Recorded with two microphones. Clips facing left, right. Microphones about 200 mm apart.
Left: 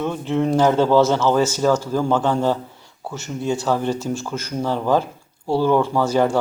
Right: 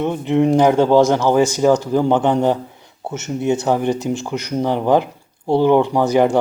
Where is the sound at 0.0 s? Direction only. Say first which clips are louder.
Right 5 dB; 20° right (ahead or behind).